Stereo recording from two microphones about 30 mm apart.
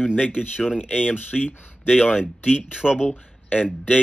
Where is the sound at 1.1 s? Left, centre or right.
Left.